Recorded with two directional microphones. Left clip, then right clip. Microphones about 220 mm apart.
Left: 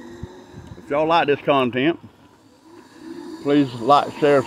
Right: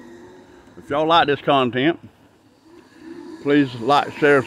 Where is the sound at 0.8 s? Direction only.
20° right (ahead or behind).